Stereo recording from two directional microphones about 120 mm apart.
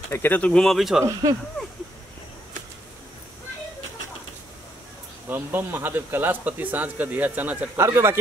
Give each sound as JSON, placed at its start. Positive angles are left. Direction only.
{"t": 0.1, "sound": "speech", "side_deg": 15}
{"t": 5.3, "sound": "speech", "side_deg": -15}